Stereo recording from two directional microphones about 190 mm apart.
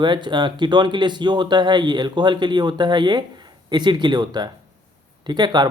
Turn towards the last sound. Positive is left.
turn(degrees=-20)  # may be behind; listen again after turning